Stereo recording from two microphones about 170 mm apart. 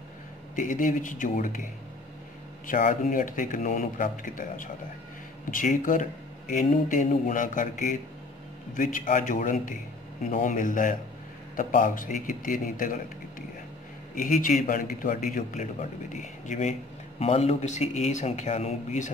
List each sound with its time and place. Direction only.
0.6 s a man's voice: 50° left (ahead or behind)
14.1 s a man's voice: 50° left (ahead or behind)